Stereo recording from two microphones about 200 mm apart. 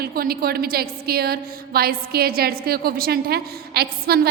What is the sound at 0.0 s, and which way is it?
A woman's voice, 50° right (ahead or behind).